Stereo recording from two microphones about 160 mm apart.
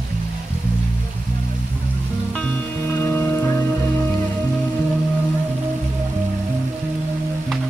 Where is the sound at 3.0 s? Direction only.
15° left (ahead or behind).